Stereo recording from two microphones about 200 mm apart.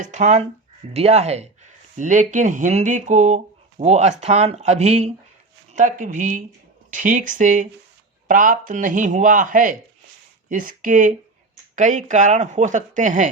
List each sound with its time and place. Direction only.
0.0 s speech: 35° right (ahead or behind)